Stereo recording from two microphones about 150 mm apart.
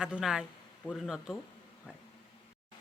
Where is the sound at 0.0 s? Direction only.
5° right (ahead or behind).